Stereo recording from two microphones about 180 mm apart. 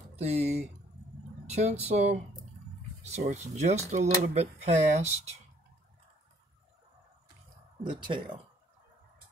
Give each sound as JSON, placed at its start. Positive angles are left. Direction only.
{"t": 0.1, "sound": "speech", "side_deg": -35}
{"t": 7.8, "sound": "speech", "side_deg": -25}